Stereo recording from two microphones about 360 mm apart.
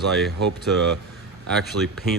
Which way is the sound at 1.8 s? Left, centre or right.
Right.